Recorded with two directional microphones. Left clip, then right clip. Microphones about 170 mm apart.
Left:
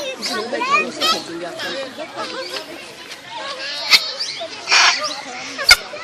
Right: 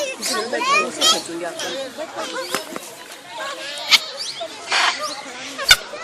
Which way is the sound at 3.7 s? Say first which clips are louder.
Left 2 dB; centre (ahead or behind).